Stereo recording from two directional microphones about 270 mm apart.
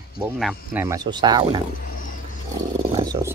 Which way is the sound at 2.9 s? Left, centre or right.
Centre.